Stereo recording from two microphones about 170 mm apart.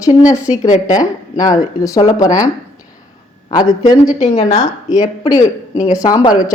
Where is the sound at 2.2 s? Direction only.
45° left (ahead or behind).